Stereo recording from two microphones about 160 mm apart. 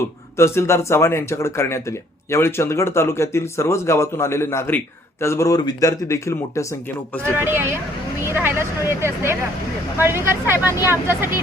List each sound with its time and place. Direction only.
0.3 s speech: 15° left (ahead or behind)
7.3 s speech: 15° right (ahead or behind)